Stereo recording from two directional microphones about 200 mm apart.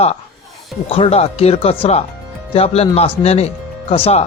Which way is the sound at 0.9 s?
25° left (ahead or behind).